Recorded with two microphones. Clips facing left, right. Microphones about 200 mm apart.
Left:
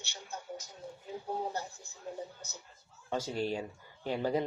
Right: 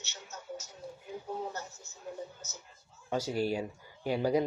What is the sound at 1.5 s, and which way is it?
Speech, 15° left (ahead or behind).